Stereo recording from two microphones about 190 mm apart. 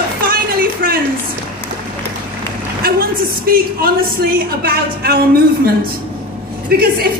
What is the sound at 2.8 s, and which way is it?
A woman's voice, 50° right (ahead or behind).